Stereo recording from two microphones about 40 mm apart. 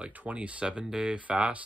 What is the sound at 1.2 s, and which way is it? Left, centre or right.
Speech, right.